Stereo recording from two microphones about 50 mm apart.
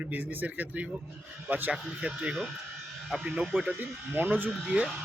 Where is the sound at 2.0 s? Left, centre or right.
Right.